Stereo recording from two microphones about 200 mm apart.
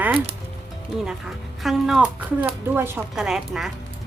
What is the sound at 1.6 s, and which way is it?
A woman's voice, centre (ahead or behind).